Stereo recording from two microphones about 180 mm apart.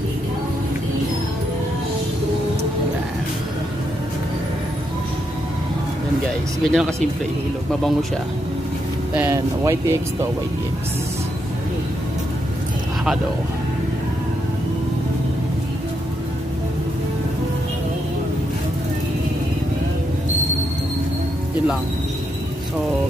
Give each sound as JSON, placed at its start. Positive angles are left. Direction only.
{"t": 6.6, "sound": "speech", "side_deg": 0}
{"t": 9.1, "sound": "speech", "side_deg": -10}